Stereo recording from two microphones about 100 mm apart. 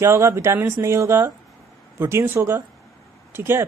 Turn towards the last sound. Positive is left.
turn(degrees=-25)  # may be behind; listen again after turning